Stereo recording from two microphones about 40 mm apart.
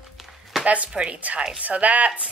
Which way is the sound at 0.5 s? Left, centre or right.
Centre.